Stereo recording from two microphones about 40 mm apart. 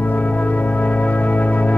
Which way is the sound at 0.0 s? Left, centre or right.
Left.